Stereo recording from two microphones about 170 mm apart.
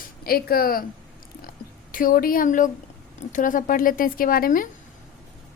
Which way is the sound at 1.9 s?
55° left (ahead or behind).